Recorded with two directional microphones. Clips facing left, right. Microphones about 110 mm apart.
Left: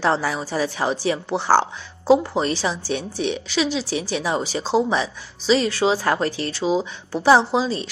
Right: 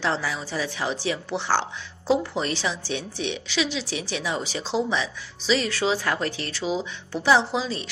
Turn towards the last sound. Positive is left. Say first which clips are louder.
# left 6 dB
turn(degrees=35)  # may be behind; listen again after turning